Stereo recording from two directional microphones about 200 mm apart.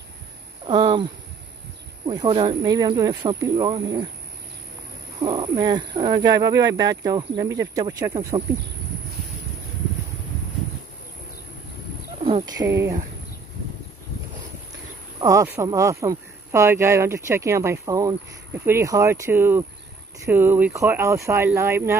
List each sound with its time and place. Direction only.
0.7 s speech: 25° right (ahead or behind)
2.0 s speech: 25° right (ahead or behind)
5.2 s speech: 25° right (ahead or behind)
12.2 s a sound: 30° right (ahead or behind)
12.5 s speech: 15° right (ahead or behind)
15.1 s speech: 15° right (ahead or behind)